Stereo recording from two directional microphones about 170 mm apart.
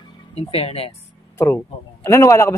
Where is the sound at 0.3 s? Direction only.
35° left (ahead or behind).